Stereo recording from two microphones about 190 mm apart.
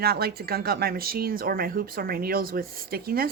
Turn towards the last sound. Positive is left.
turn(degrees=-50)  # may be behind; listen again after turning